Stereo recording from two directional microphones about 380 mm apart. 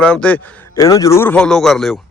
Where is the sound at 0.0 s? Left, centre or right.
Centre.